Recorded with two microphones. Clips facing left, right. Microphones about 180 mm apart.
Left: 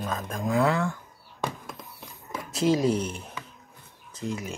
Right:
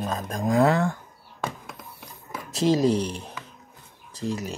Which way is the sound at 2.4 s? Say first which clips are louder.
Right 2 dB; 40° right (ahead or behind).